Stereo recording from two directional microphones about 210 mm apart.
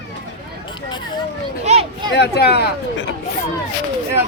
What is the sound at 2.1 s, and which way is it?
Speech, 50° left (ahead or behind).